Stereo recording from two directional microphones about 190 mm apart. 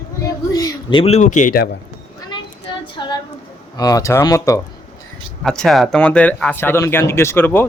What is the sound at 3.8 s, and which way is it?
Speech, 20° left (ahead or behind).